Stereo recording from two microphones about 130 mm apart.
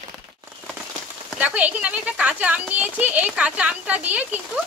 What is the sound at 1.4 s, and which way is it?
A child's voice, 10° right (ahead or behind).